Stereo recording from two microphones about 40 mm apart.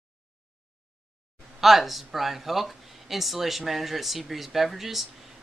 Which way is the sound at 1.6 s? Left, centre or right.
Centre.